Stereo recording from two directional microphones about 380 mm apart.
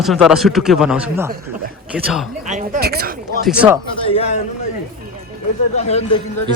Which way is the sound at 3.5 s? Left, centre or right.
Centre.